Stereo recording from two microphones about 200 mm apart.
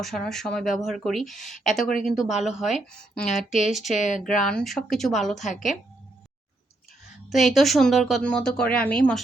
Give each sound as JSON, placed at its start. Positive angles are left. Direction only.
{"t": 0.0, "sound": "a woman's voice", "side_deg": 0}
{"t": 3.9, "sound": "speech", "side_deg": 35}
{"t": 4.4, "sound": "a woman's voice", "side_deg": 5}
{"t": 7.3, "sound": "a woman's voice", "side_deg": 0}